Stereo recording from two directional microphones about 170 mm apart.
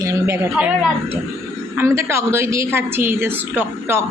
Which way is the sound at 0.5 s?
5° right (ahead or behind).